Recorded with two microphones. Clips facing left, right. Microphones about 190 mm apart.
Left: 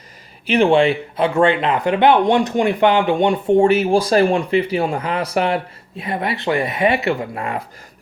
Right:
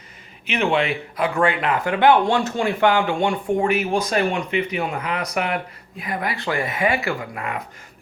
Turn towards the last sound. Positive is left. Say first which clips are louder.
# left 4 dB
turn(degrees=30)  # may be behind; listen again after turning